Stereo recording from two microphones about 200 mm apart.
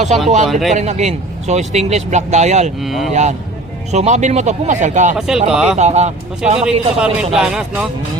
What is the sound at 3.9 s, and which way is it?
A man's voice, 35° right (ahead or behind).